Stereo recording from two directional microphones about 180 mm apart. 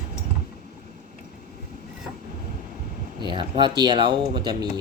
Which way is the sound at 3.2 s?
25° right (ahead or behind).